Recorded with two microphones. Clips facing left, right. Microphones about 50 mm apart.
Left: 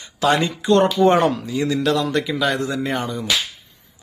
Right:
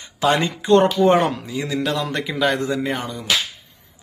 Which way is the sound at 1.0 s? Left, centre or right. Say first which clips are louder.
Left 1 dB; centre.